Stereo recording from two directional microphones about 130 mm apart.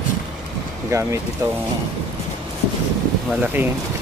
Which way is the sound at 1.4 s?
25° right (ahead or behind).